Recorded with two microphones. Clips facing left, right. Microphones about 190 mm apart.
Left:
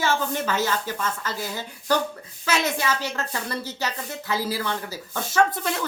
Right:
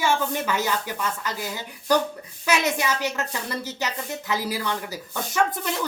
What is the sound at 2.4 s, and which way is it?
A woman's voice, 15° right (ahead or behind).